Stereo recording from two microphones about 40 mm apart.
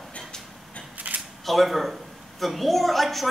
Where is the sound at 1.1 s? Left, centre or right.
Right.